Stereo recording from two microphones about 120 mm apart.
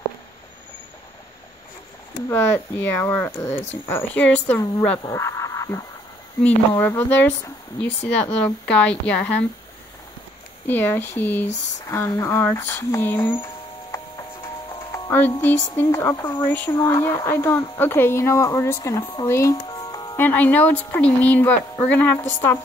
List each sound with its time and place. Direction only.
2.2 s speech: 25° left (ahead or behind)
5.0 s a sound: 25° left (ahead or behind)
6.7 s speech: 20° left (ahead or behind)
10.7 s speech: 15° left (ahead or behind)
13.9 s music: 25° left (ahead or behind)
15.4 s speech: 15° left (ahead or behind)
19.7 s music: 35° left (ahead or behind)
20.2 s speech: 15° left (ahead or behind)